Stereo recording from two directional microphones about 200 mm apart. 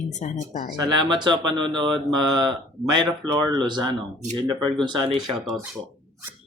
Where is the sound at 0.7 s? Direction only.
20° right (ahead or behind).